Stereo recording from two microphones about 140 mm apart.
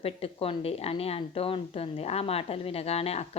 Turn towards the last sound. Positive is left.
turn(degrees=45)  # may be behind; listen again after turning